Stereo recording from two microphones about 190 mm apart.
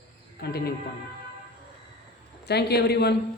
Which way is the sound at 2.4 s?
60° left (ahead or behind).